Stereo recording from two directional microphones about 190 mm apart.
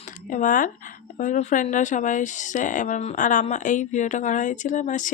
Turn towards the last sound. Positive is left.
turn(degrees=40)  # may be behind; listen again after turning